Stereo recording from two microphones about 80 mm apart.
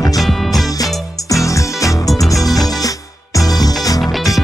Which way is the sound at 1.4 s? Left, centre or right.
Left.